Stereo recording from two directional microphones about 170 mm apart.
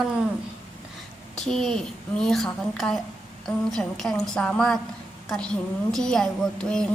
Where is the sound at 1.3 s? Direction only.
Centre (ahead or behind).